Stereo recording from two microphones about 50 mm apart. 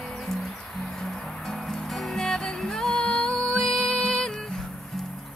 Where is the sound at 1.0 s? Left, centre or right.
Centre.